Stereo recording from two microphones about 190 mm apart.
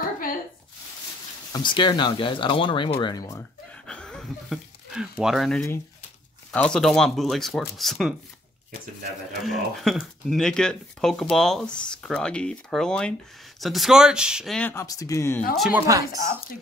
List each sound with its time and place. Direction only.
1.5 s speech: 25° left (ahead or behind)
3.8 s a sound: 5° left (ahead or behind)
6.5 s speech: 5° left (ahead or behind)
9.4 s speech: centre (ahead or behind)
15.5 s speech: centre (ahead or behind)
15.9 s speech: 20° right (ahead or behind)